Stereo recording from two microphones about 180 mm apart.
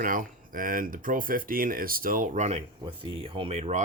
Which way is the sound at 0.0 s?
50° right (ahead or behind).